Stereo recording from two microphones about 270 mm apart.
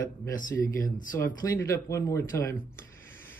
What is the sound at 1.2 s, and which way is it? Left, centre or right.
Speech, centre.